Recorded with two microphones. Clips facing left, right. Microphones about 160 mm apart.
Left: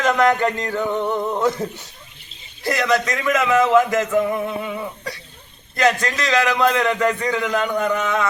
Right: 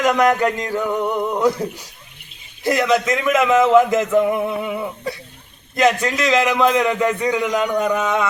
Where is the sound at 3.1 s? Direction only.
20° right (ahead or behind).